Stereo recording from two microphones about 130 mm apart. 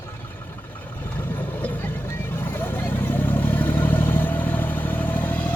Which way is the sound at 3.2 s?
15° left (ahead or behind).